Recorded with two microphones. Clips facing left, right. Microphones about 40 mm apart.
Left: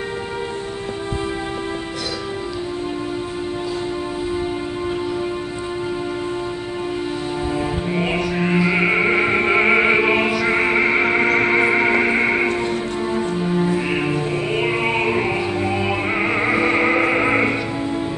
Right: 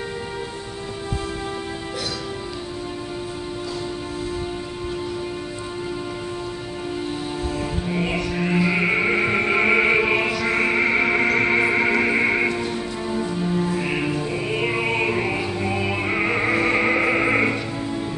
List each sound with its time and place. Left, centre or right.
7.5 s music: centre
12.4 s music: left